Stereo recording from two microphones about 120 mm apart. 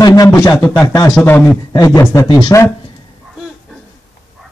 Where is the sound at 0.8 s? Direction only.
30° left (ahead or behind).